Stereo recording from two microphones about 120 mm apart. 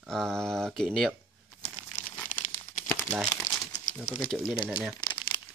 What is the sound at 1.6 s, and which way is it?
Crumpling, 65° left (ahead or behind).